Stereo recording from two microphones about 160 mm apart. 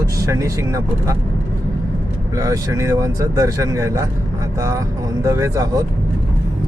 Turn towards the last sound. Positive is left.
turn(degrees=-20)  # may be behind; listen again after turning